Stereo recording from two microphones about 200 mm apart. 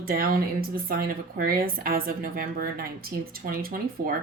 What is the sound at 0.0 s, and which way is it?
Speech, 45° right (ahead or behind).